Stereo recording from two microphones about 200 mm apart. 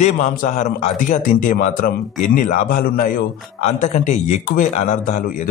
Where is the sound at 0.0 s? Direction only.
40° left (ahead or behind).